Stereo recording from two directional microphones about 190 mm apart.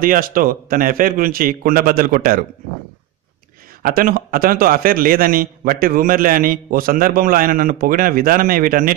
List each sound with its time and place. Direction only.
0.0 s a man's voice: 50° right (ahead or behind)
3.8 s a man's voice: 50° right (ahead or behind)